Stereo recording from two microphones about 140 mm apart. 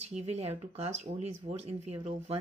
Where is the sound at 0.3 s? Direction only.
45° right (ahead or behind).